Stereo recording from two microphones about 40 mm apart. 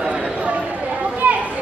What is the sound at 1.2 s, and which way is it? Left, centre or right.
Children playing, right.